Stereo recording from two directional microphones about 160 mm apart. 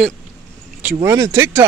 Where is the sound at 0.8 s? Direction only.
10° right (ahead or behind).